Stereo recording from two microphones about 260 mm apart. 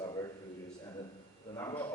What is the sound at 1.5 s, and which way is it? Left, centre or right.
Speech, centre.